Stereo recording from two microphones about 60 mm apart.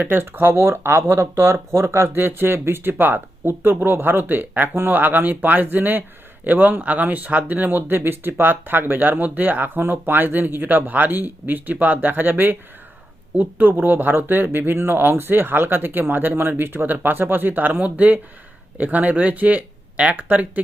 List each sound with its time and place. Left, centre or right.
0.0 s speech: right